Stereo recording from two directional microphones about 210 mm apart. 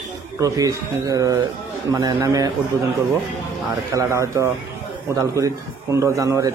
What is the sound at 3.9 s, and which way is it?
A man's voice, 15° right (ahead or behind).